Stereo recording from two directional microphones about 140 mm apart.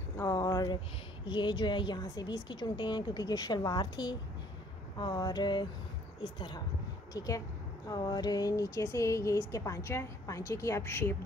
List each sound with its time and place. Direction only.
0.2 s a sound: 25° left (ahead or behind)
1.3 s a woman's voice: 35° left (ahead or behind)
7.2 s speech: 25° left (ahead or behind)